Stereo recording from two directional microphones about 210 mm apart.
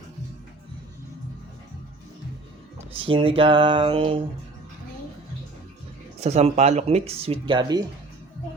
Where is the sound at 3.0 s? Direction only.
25° right (ahead or behind).